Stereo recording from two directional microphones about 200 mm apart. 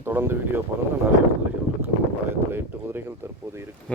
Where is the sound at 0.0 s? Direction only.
10° right (ahead or behind).